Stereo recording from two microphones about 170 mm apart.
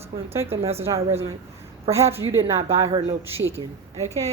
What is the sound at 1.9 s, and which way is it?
Speech, 35° right (ahead or behind).